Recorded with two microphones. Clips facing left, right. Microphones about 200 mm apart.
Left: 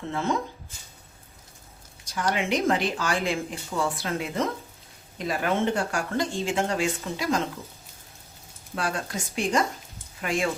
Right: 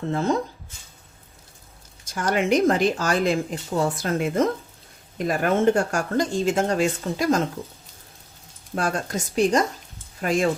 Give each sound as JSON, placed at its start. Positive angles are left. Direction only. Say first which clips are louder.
{"t": 0.1, "sound": "speech", "louder": "right 4 dB", "side_deg": -35}
{"t": 2.1, "sound": "speech", "louder": "right 5 dB", "side_deg": -45}
{"t": 8.7, "sound": "speech", "louder": "right 4 dB", "side_deg": -45}